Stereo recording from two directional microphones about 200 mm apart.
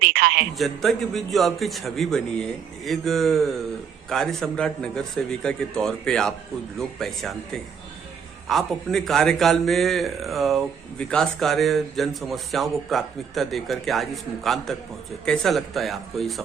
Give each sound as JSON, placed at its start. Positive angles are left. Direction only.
{"t": 0.1, "sound": "speech", "side_deg": -50}
{"t": 0.5, "sound": "a man's voice", "side_deg": 0}